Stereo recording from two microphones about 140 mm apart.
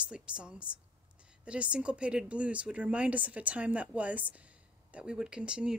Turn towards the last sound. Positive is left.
turn(degrees=-5)  # may be behind; listen again after turning